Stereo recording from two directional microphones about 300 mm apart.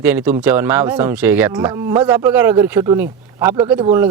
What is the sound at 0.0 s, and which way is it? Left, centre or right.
Speech, centre.